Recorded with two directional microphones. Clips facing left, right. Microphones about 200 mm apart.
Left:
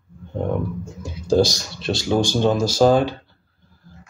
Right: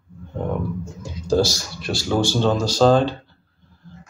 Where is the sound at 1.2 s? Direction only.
15° left (ahead or behind).